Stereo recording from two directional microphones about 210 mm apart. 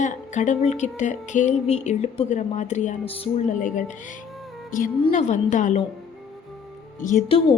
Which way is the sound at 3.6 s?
35° left (ahead or behind).